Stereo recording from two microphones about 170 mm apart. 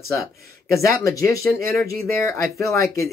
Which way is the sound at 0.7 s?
20° left (ahead or behind).